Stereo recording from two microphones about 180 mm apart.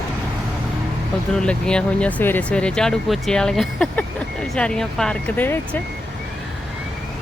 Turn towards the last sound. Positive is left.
turn(degrees=10)  # may be behind; listen again after turning